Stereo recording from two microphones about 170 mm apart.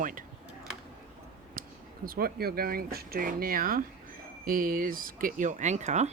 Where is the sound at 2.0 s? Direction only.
60° right (ahead or behind).